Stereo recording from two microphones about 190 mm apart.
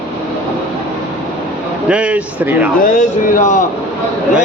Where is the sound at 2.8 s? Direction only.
40° left (ahead or behind).